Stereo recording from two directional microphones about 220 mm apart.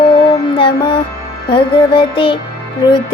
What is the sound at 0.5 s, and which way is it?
Music, 20° left (ahead or behind).